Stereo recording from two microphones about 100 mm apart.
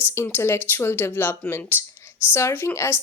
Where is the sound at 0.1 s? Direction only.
25° left (ahead or behind).